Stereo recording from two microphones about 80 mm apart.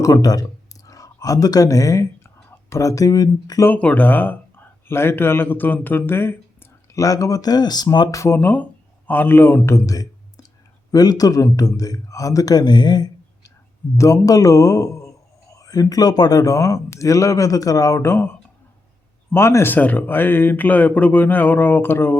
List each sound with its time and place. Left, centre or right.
0.0 s speech: left
3.7 s speech: centre
6.9 s speech: left
8.1 s speech: left
8.4 s speech: left
9.6 s a sound: left
10.9 s speech: left
14.0 s speech: left
19.7 s speech: left